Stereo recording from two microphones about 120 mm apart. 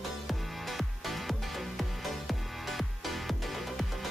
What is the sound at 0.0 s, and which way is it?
Music, centre (ahead or behind).